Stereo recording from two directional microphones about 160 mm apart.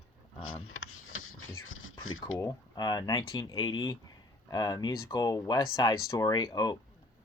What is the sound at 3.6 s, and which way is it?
Speech, 30° left (ahead or behind).